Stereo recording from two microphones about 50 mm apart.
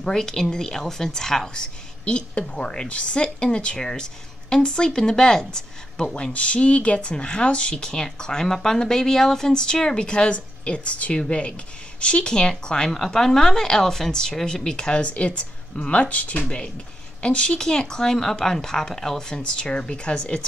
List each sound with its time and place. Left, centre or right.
0.0 s a woman's voice: centre
6.3 s a woman's voice: left